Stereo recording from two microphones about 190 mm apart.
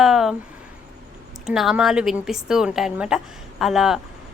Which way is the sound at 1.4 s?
Centre (ahead or behind).